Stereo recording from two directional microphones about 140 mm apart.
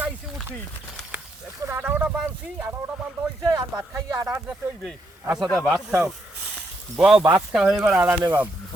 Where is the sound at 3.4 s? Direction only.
25° right (ahead or behind).